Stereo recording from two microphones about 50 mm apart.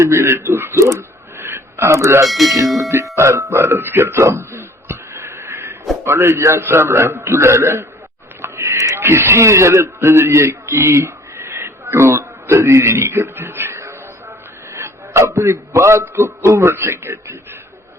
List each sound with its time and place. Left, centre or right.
0.0 s a man's voice: right
0.4 s speech: right
0.9 s a sound: right
2.3 s speech: centre
3.2 s a man's voice: right
3.5 s a sound: right
6.1 s a man's voice: right
6.6 s a man's voice: right
8.4 s a sound: right
9.0 s a man's voice: right